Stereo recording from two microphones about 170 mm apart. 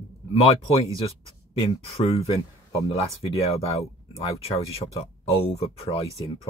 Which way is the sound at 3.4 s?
35° left (ahead or behind).